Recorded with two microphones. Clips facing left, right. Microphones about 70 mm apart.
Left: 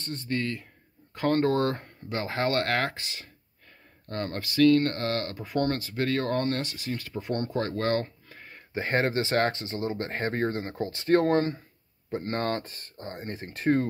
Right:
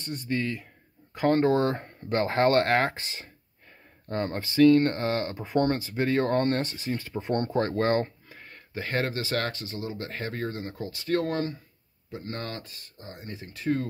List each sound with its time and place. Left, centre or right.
0.0 s speech: centre
2.0 s speech: right
4.1 s speech: centre
8.4 s a sound: centre
8.7 s speech: left